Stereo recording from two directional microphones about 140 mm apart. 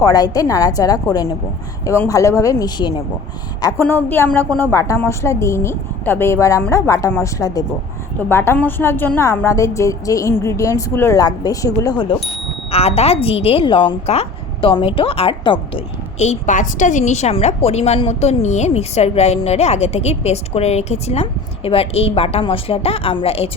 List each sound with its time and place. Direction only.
0.0 s a woman's voice: 25° left (ahead or behind)
3.6 s a woman's voice: 20° left (ahead or behind)
12.7 s a woman's voice: 45° left (ahead or behind)
16.1 s a woman's voice: 55° left (ahead or behind)